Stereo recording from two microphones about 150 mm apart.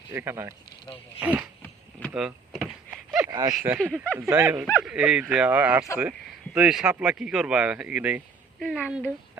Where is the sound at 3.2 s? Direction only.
15° right (ahead or behind).